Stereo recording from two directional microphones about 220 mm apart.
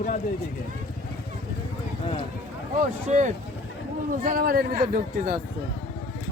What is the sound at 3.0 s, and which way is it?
A man's voice, 35° right (ahead or behind).